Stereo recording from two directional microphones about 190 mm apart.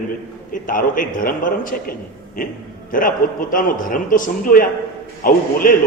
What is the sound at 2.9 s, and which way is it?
A man's voice, 45° left (ahead or behind).